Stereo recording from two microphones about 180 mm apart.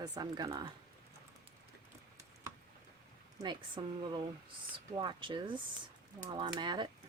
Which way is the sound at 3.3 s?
25° right (ahead or behind).